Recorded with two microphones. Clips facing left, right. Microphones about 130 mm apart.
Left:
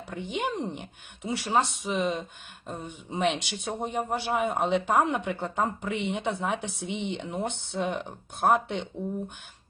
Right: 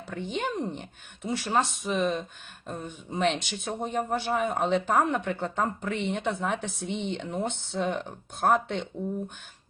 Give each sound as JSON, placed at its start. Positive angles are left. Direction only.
{"t": 0.1, "sound": "speech", "side_deg": 15}